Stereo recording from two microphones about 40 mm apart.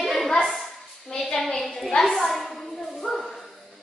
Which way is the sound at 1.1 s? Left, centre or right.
Centre.